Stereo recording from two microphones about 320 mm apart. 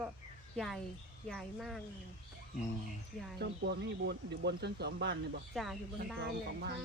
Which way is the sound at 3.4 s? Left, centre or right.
Right.